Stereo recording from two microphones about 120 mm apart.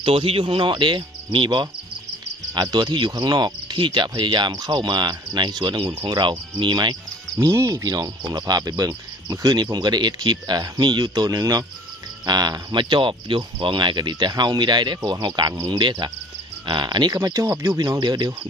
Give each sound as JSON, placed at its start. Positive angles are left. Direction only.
{"t": 0.0, "sound": "speech", "side_deg": -50}
{"t": 7.3, "sound": "speech", "side_deg": -25}
{"t": 15.5, "sound": "speech", "side_deg": -25}
{"t": 15.8, "sound": "speech", "side_deg": -40}